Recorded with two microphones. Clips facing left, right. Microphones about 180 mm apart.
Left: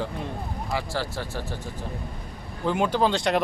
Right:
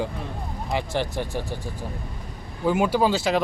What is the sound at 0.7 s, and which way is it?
Speech, 20° right (ahead or behind).